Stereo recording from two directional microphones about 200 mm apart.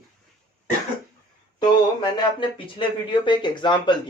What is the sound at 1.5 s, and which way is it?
Speech, 20° left (ahead or behind).